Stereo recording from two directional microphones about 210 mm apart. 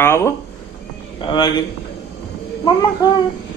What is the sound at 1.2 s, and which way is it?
Speech, 20° left (ahead or behind).